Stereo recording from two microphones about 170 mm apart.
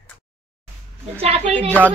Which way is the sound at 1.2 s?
35° right (ahead or behind).